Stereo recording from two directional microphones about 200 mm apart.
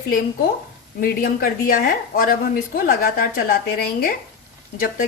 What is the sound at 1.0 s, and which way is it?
A woman's voice, 45° left (ahead or behind).